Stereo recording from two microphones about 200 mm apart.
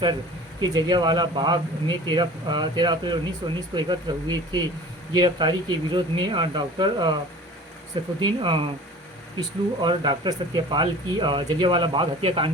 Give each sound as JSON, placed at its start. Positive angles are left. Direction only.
{"t": 0.6, "sound": "speech", "side_deg": -20}
{"t": 8.2, "sound": "speech", "side_deg": -25}